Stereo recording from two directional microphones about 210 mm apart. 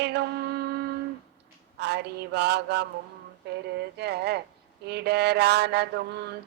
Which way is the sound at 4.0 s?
50° right (ahead or behind).